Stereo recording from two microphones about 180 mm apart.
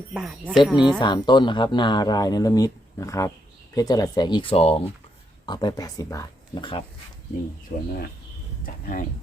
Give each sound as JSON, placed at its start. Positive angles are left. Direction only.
{"t": 0.1, "sound": "speech", "side_deg": -5}
{"t": 0.9, "sound": "speech", "side_deg": 25}
{"t": 5.5, "sound": "speech", "side_deg": 25}
{"t": 7.7, "sound": "speech", "side_deg": 50}